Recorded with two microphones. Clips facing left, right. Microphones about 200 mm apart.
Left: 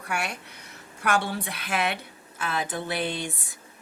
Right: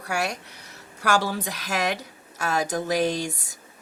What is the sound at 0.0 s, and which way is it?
Speech, 40° right (ahead or behind).